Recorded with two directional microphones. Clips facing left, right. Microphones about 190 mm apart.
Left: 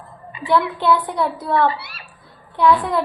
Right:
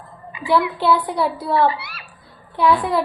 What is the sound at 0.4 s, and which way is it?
A woman's voice, 10° right (ahead or behind).